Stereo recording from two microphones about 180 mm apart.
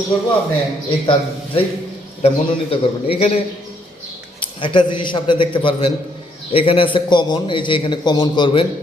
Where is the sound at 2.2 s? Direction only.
30° left (ahead or behind).